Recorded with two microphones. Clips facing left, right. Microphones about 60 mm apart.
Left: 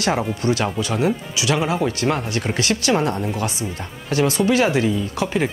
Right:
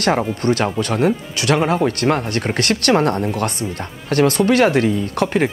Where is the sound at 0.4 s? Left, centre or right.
Right.